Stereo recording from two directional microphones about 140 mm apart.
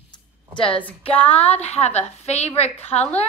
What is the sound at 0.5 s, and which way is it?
Speech, 35° left (ahead or behind).